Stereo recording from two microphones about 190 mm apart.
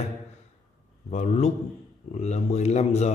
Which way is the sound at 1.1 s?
35° left (ahead or behind).